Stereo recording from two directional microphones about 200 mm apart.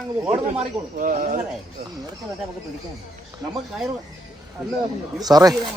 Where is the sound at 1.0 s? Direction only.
40° right (ahead or behind).